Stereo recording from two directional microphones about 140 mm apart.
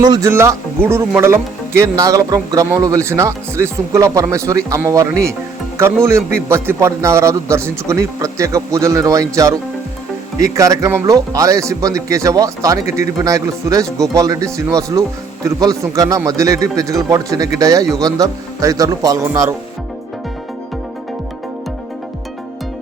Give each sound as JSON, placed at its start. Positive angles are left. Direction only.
{"t": 0.0, "sound": "speech", "side_deg": -30}
{"t": 0.3, "sound": "speech", "side_deg": -20}